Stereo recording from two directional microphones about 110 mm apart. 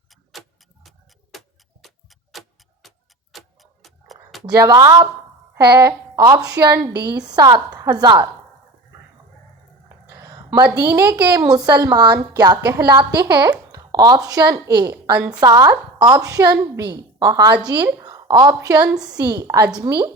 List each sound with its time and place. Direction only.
1.3 s tick-tock: centre (ahead or behind)
1.8 s clock: centre (ahead or behind)
3.3 s tick-tock: centre (ahead or behind)
4.4 s a woman's voice: 35° right (ahead or behind)
10.1 s a woman's voice: 30° right (ahead or behind)